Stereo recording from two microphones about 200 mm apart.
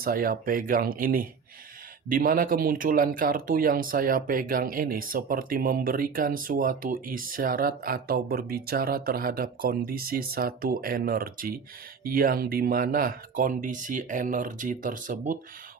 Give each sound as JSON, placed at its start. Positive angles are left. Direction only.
{"t": 0.0, "sound": "speech", "side_deg": -45}